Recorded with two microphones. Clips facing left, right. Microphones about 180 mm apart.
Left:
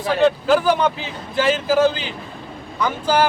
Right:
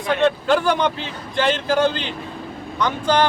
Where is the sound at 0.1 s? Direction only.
5° left (ahead or behind).